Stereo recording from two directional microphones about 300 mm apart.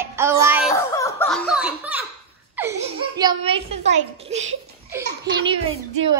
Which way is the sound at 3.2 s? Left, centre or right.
Centre.